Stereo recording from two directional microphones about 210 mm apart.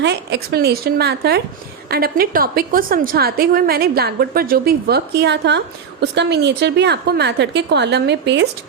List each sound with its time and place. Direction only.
0.0 s a woman's voice: 50° right (ahead or behind)